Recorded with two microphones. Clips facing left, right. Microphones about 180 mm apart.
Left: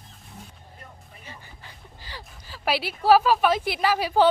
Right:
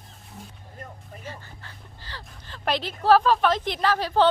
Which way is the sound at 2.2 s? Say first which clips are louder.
Left 1 dB; 5° left (ahead or behind).